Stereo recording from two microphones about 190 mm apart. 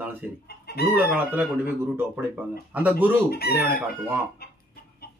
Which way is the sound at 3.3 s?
55° left (ahead or behind).